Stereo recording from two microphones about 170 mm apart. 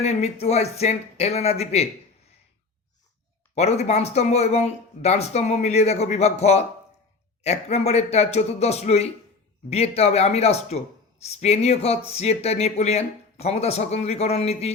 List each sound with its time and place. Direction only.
0.0 s speech: 40° left (ahead or behind)
3.5 s speech: 40° left (ahead or behind)